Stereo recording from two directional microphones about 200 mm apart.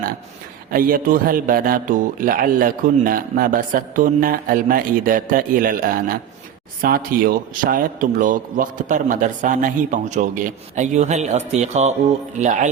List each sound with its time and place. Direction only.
0.7 s a man's voice: 45° right (ahead or behind)